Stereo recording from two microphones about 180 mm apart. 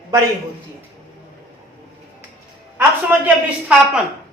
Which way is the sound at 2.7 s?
10° right (ahead or behind).